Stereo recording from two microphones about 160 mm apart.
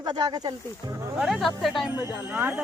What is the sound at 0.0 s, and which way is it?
Speech, 25° right (ahead or behind).